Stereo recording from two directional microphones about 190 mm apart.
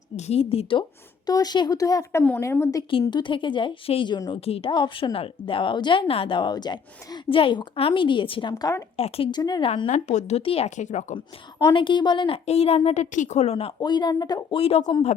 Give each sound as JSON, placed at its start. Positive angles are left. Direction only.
{"t": 0.2, "sound": "a woman's voice", "side_deg": 35}
{"t": 9.0, "sound": "a woman's voice", "side_deg": 30}
{"t": 9.8, "sound": "a woman's voice", "side_deg": 40}
{"t": 11.6, "sound": "a woman's voice", "side_deg": 25}